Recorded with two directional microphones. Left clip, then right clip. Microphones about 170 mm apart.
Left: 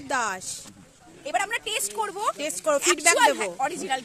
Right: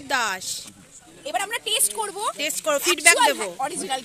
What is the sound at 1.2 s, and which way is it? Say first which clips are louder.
Speech: right 1 dB; 25° right (ahead or behind).